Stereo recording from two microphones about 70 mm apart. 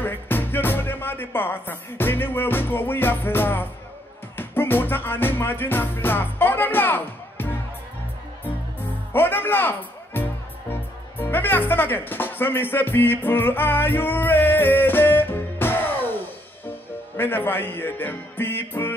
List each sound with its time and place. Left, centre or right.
0.0 s music: left
9.1 s speech: left
17.2 s music: left